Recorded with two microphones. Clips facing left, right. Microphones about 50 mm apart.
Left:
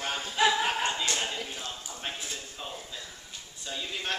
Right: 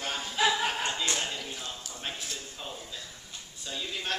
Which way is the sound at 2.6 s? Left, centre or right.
Centre.